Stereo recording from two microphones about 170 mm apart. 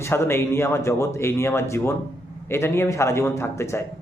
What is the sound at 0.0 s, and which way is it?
Speech, 15° left (ahead or behind).